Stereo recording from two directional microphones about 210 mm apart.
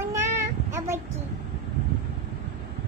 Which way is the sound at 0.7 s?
15° right (ahead or behind).